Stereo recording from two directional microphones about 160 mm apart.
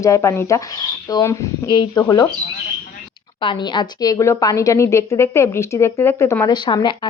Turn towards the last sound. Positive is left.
turn(degrees=30)  # may be behind; listen again after turning